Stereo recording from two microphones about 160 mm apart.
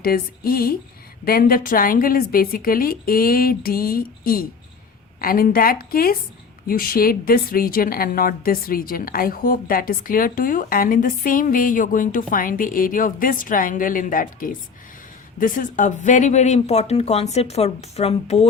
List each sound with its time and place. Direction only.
0.0 s speech: 70° left (ahead or behind); by 18.4 s 40° left (ahead or behind)